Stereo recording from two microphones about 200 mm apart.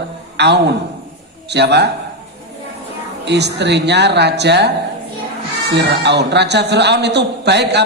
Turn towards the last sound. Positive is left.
turn(degrees=-60)  # may be behind; listen again after turning